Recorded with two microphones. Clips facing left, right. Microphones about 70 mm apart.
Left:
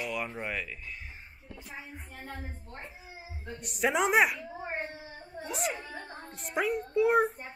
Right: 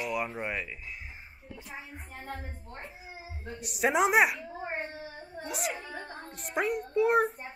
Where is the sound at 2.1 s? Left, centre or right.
Right.